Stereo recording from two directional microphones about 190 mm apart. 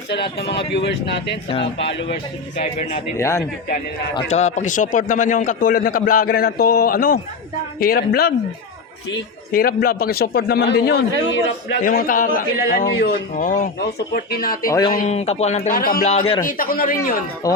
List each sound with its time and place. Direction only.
0.1 s a man's voice: 60° left (ahead or behind)
2.6 s speech: 35° left (ahead or behind)
3.2 s a man's voice: 15° left (ahead or behind)
4.3 s a man's voice: 35° left (ahead or behind); by 8.3 s 55° left (ahead or behind)
9.5 s a man's voice: 50° left (ahead or behind)
11.8 s a man's voice: 50° left (ahead or behind)
15.1 s speech: 35° left (ahead or behind)
15.7 s a man's voice: 50° left (ahead or behind)
16.0 s speech: 30° left (ahead or behind)
16.5 s a man's voice: 50° left (ahead or behind)
17.4 s speech: 20° left (ahead or behind)